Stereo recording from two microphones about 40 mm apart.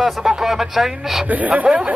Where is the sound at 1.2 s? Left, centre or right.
Right.